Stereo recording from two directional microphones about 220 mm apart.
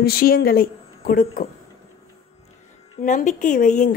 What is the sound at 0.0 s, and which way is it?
A woman's voice, 45° left (ahead or behind).